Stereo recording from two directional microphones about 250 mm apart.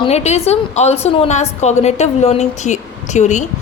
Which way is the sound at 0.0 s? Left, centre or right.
Left.